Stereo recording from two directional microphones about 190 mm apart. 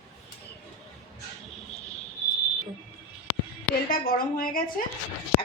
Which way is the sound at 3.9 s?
50° left (ahead or behind).